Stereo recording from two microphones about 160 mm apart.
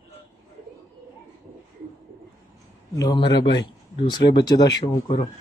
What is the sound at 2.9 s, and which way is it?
Speech, 25° left (ahead or behind).